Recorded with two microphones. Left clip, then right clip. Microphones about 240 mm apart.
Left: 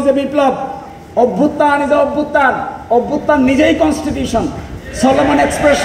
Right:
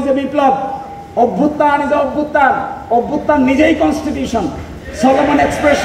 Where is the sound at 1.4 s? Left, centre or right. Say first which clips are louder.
Left 1 dB; left.